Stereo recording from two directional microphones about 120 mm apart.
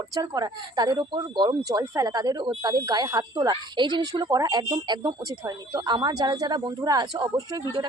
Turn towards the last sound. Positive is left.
turn(degrees=-30)  # may be behind; listen again after turning